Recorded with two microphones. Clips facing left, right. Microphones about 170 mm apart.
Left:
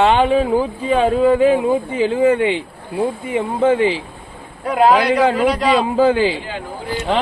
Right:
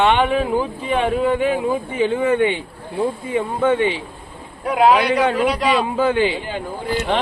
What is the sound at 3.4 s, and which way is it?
Speech, 30° left (ahead or behind).